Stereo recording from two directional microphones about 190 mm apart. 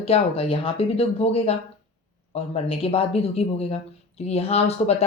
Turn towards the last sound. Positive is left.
turn(degrees=35)  # may be behind; listen again after turning